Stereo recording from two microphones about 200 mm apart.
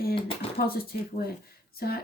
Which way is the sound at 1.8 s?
50° left (ahead or behind).